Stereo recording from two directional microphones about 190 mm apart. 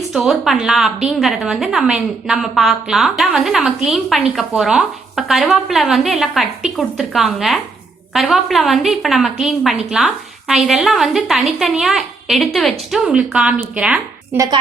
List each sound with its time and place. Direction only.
0.1 s a woman's voice: centre (ahead or behind)
14.3 s a woman's voice: 20° right (ahead or behind)